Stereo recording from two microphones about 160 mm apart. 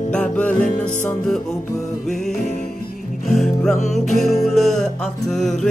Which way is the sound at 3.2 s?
Centre (ahead or behind).